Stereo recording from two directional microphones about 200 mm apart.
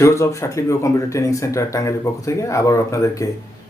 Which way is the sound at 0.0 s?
15° left (ahead or behind).